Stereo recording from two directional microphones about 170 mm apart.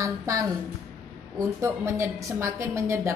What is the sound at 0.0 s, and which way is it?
Speech, 20° right (ahead or behind).